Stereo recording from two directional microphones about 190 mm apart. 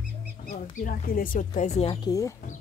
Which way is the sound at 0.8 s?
45° left (ahead or behind).